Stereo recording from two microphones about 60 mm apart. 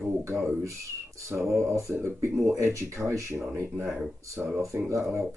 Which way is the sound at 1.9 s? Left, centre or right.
Right.